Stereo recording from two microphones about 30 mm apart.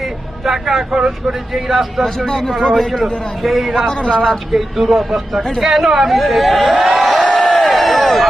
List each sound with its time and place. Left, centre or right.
0.0 s vehicle: centre
0.9 s speech: right
1.3 s a man's voice: centre
2.0 s a man's voice: left
2.7 s speech: centre
3.9 s speech: left
4.5 s a man's voice: centre
7.0 s crowd: centre
7.3 s a sound: centre